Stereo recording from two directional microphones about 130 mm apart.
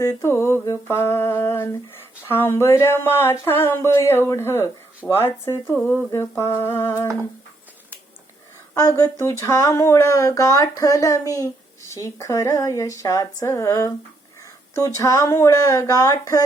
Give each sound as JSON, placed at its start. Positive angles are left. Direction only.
{"t": 0.0, "sound": "speech", "side_deg": 25}
{"t": 8.7, "sound": "speech", "side_deg": 25}